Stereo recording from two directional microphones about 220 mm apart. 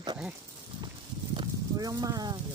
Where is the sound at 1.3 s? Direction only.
20° right (ahead or behind).